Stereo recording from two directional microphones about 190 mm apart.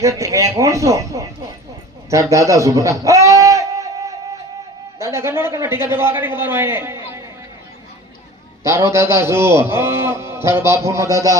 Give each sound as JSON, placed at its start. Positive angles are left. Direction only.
{"t": 0.0, "sound": "a man's voice", "side_deg": -15}
{"t": 2.0, "sound": "a sound", "side_deg": -15}
{"t": 4.9, "sound": "a man's voice", "side_deg": -15}
{"t": 8.6, "sound": "a man's voice", "side_deg": -15}